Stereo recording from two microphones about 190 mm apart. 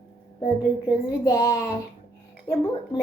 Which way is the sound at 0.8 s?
15° left (ahead or behind).